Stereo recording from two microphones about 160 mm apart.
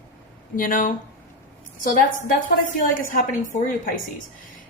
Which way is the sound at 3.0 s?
55° left (ahead or behind).